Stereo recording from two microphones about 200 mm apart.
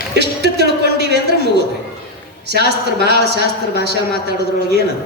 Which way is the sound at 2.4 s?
55° right (ahead or behind).